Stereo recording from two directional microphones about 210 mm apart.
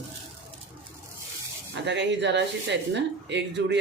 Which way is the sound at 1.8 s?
55° right (ahead or behind).